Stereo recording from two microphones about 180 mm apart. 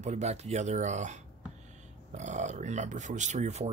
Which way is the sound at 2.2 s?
40° right (ahead or behind).